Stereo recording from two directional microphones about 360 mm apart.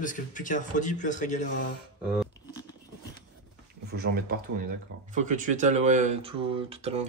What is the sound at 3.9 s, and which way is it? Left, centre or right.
Speech, right.